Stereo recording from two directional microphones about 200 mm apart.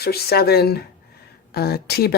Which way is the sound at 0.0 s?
50° left (ahead or behind).